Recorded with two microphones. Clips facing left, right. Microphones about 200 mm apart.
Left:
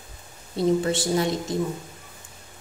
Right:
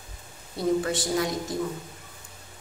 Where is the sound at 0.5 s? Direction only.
25° left (ahead or behind).